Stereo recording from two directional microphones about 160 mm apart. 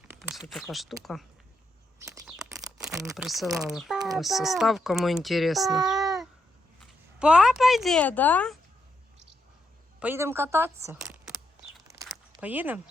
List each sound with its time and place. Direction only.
0.1 s a sound: 5° right (ahead or behind)
0.5 s speech: centre (ahead or behind)
3.2 s speech: centre (ahead or behind)
5.8 s child singing: 25° right (ahead or behind)
7.2 s speech: 5° right (ahead or behind)
10.0 s speech: 15° right (ahead or behind)
12.4 s speech: 10° right (ahead or behind)